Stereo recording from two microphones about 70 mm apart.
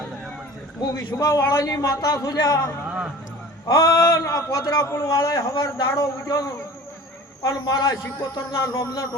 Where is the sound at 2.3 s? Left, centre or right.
Left.